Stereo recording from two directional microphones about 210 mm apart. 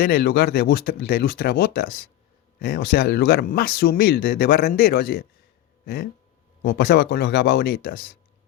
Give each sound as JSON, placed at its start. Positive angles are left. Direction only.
{"t": 0.0, "sound": "speech", "side_deg": 45}